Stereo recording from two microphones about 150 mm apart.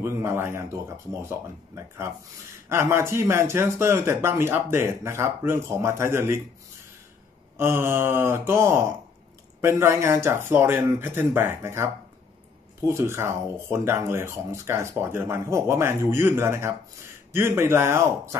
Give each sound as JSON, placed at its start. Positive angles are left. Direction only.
{"t": 0.0, "sound": "speech", "side_deg": -15}
{"t": 2.7, "sound": "speech", "side_deg": -15}
{"t": 7.5, "sound": "speech", "side_deg": -15}